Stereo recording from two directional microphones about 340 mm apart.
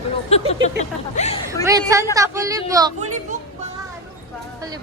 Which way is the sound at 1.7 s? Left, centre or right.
Centre.